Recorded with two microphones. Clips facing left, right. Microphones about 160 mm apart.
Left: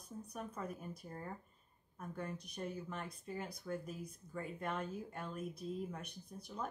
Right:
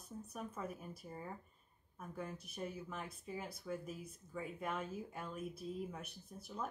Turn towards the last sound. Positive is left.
turn(degrees=-5)  # may be behind; listen again after turning